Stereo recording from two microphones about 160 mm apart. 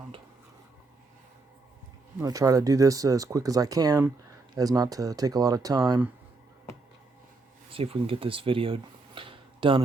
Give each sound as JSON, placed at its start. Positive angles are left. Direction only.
{"t": 2.2, "sound": "speech", "side_deg": -20}
{"t": 7.7, "sound": "speech", "side_deg": -35}